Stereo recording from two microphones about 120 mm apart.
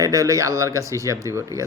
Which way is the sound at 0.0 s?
30° right (ahead or behind).